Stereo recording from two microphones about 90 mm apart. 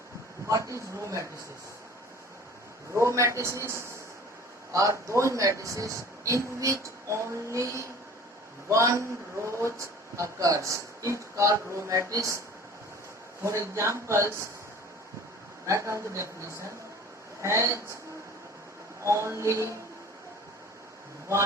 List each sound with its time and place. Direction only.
0.4 s a man's voice: 35° right (ahead or behind)
2.9 s a man's voice: 35° right (ahead or behind)
13.4 s a man's voice: 30° right (ahead or behind)
15.6 s a man's voice: 35° right (ahead or behind)
19.0 s a man's voice: 35° right (ahead or behind)